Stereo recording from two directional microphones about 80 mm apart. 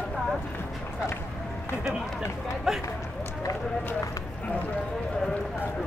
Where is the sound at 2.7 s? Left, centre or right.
Centre.